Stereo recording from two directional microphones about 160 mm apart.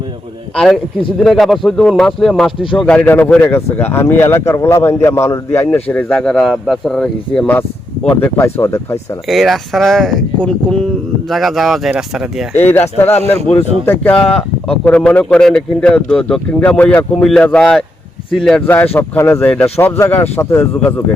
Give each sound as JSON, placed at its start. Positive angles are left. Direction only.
{"t": 0.5, "sound": "speech", "side_deg": 5}
{"t": 9.2, "sound": "speech", "side_deg": 0}
{"t": 12.5, "sound": "speech", "side_deg": 10}